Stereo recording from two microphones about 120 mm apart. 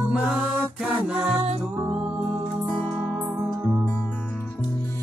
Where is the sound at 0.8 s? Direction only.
5° right (ahead or behind).